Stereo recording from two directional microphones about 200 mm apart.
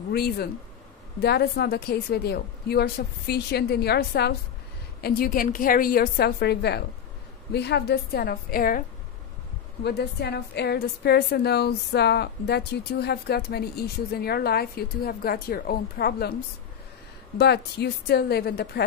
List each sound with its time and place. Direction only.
0.1 s a woman's voice: 50° left (ahead or behind)
9.8 s a woman's voice: 55° left (ahead or behind)
17.4 s a woman's voice: 55° left (ahead or behind)